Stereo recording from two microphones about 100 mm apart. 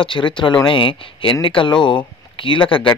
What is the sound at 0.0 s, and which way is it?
Speech, 60° left (ahead or behind).